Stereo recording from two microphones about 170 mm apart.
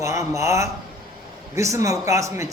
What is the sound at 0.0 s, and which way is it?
A man's voice, 20° right (ahead or behind).